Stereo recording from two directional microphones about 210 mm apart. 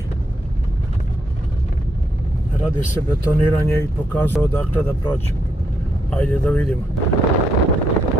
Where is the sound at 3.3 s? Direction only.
10° left (ahead or behind).